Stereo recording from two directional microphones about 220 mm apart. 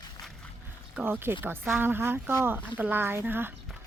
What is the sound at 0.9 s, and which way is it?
Speech, 10° right (ahead or behind).